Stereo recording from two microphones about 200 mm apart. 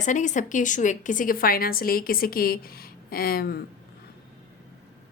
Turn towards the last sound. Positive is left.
turn(degrees=50)  # may be behind; listen again after turning